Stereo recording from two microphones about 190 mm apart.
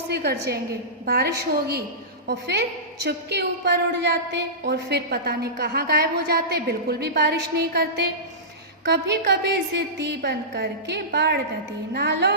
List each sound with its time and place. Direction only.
0.1 s a woman's voice: 55° right (ahead or behind)